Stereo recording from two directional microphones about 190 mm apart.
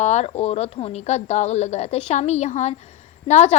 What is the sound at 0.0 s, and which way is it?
Speech, 35° left (ahead or behind).